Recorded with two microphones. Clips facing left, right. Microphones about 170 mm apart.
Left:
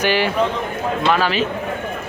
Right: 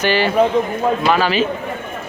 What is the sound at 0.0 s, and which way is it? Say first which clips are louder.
Speech: right 1 dB; 10° left (ahead or behind).